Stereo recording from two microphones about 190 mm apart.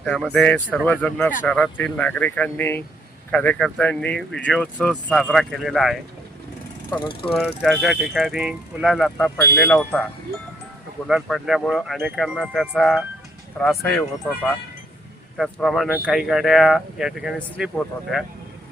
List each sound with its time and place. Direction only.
0.0 s speech: centre (ahead or behind)
6.9 s speech: 25° left (ahead or behind)
7.3 s speech: centre (ahead or behind)
11.1 s speech: centre (ahead or behind)
15.4 s speech: centre (ahead or behind)